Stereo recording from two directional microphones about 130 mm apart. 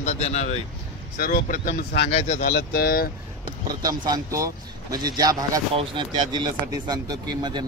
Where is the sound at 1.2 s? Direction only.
90° left.